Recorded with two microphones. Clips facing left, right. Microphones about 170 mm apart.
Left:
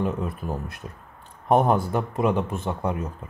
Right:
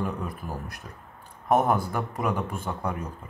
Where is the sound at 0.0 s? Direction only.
25° left (ahead or behind).